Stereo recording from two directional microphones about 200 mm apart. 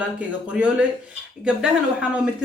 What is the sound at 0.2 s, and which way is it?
Speech, 5° right (ahead or behind).